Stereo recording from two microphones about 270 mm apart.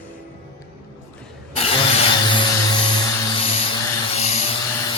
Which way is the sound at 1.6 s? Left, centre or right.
Left.